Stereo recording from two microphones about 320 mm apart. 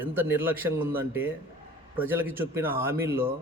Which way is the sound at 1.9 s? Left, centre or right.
Centre.